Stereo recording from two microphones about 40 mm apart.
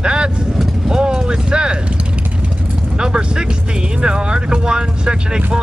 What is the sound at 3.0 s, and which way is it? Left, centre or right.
Speech, right.